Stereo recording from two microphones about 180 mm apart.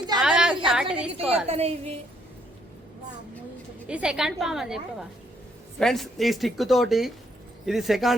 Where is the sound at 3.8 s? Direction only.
5° right (ahead or behind).